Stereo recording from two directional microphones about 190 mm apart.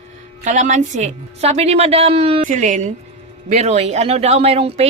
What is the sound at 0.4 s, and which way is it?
Speech, 40° right (ahead or behind).